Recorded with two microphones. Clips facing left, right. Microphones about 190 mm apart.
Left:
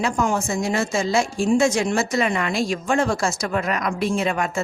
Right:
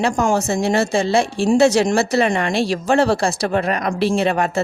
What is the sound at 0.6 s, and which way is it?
Speech, 70° right (ahead or behind).